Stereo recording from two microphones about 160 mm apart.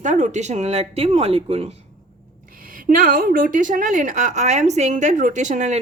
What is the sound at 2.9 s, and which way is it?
A woman's voice, 65° right (ahead or behind).